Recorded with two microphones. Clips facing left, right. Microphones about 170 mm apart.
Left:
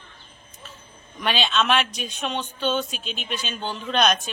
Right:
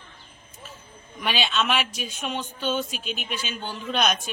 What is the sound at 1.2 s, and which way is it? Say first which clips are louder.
Speech: left 2 dB; 10° right (ahead or behind).